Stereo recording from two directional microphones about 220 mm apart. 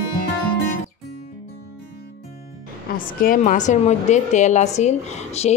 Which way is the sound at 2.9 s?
40° left (ahead or behind).